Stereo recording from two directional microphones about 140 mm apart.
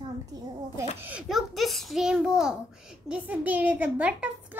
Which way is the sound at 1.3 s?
Centre (ahead or behind).